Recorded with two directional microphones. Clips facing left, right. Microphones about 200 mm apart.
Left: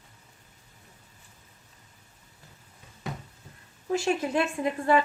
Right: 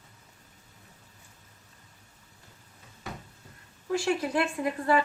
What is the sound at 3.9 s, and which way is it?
Speech, 25° left (ahead or behind).